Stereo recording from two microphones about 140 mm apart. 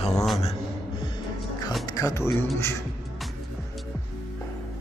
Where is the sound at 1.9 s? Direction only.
25° left (ahead or behind).